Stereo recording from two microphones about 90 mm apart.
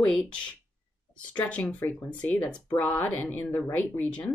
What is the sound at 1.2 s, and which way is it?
Speech, 15° left (ahead or behind).